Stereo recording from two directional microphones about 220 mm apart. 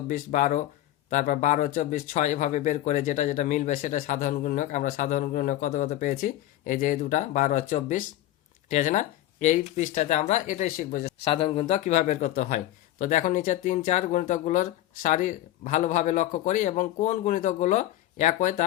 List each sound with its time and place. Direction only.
0.1 s speech: 35° left (ahead or behind)
11.3 s speech: 25° left (ahead or behind)